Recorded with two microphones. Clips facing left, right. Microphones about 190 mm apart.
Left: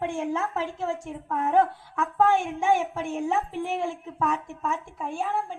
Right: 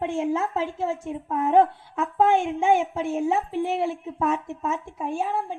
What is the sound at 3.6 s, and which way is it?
A woman's voice, 15° right (ahead or behind).